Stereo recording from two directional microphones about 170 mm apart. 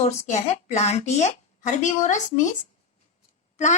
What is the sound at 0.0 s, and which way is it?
A woman's voice, 40° left (ahead or behind).